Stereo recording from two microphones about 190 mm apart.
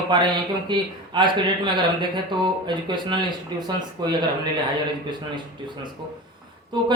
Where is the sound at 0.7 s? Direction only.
25° right (ahead or behind).